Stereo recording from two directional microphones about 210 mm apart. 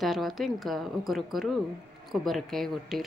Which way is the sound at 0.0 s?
Centre (ahead or behind).